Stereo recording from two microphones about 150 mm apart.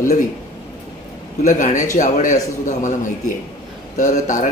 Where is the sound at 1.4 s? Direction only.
55° left (ahead or behind).